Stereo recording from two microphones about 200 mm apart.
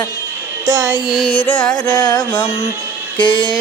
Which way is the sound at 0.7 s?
15° right (ahead or behind).